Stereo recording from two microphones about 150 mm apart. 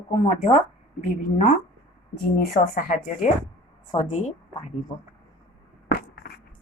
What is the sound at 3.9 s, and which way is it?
Speech, 35° left (ahead or behind).